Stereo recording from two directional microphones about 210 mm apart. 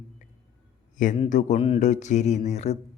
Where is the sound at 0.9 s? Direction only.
35° left (ahead or behind).